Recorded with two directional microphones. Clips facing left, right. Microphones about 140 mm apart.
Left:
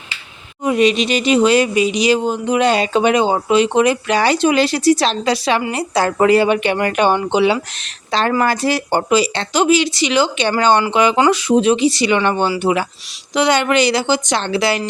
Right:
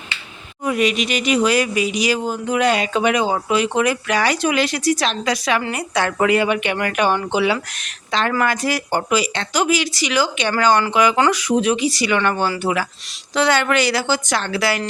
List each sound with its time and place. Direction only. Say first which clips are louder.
0.6 s speech: left 5 dB; 25° left (ahead or behind)